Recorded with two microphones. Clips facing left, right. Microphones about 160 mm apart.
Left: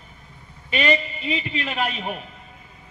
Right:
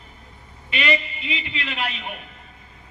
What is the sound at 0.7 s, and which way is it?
A man's voice, 40° left (ahead or behind).